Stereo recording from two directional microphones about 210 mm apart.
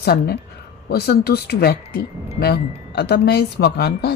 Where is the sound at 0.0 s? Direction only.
50° left (ahead or behind).